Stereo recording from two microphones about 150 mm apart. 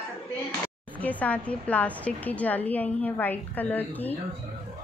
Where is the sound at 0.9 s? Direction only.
10° left (ahead or behind).